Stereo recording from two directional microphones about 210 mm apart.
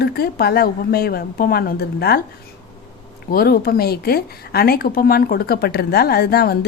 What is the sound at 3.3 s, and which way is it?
A woman's voice, 45° left (ahead or behind).